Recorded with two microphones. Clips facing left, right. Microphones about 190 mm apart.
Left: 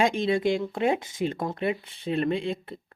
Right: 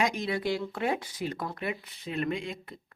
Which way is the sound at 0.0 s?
25° left (ahead or behind).